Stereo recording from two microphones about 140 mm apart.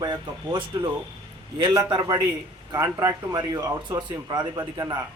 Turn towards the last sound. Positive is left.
turn(degrees=-25)  # may be behind; listen again after turning